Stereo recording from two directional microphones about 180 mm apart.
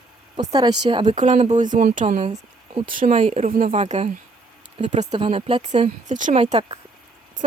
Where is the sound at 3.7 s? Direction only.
35° right (ahead or behind).